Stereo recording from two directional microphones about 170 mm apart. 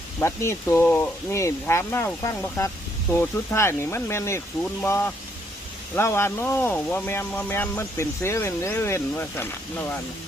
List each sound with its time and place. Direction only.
0.2 s speech: 15° left (ahead or behind)